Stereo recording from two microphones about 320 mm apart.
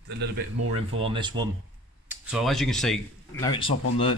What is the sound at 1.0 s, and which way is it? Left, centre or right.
Speech, centre.